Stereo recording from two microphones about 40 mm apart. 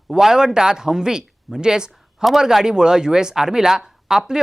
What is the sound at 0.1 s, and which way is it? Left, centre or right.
Speech, centre.